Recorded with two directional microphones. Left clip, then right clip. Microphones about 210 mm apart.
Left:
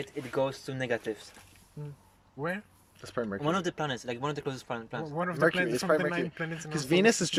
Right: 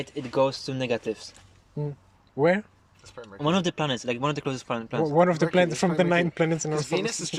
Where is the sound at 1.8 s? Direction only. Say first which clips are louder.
Right 13 dB; 30° right (ahead or behind).